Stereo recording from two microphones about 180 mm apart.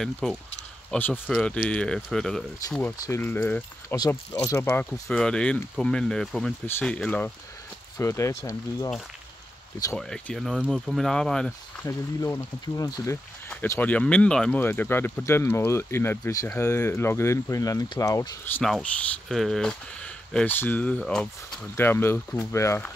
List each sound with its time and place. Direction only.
0.0 s speech: 5° left (ahead or behind)
3.9 s speech: 20° left (ahead or behind)
9.9 s speech: 5° left (ahead or behind)
12.2 s speech: 20° left (ahead or behind)
18.6 s speech: centre (ahead or behind)